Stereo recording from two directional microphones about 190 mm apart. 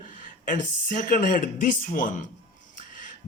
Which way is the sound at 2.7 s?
45° left (ahead or behind).